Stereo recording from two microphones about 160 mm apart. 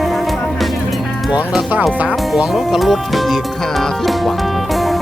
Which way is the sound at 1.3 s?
5° right (ahead or behind).